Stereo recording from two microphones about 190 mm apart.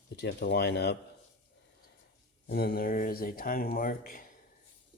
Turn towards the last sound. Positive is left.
turn(degrees=50)  # may be behind; listen again after turning